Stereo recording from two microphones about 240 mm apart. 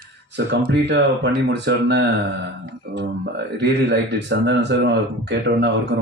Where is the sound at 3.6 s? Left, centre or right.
Right.